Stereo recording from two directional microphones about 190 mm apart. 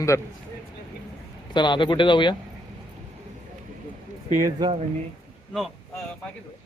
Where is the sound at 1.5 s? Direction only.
25° left (ahead or behind).